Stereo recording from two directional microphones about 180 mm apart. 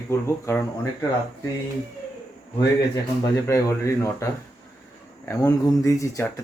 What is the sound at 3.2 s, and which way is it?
Speech, 15° left (ahead or behind).